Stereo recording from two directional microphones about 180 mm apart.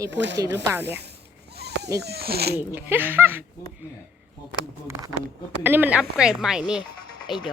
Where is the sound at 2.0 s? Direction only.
60° right (ahead or behind).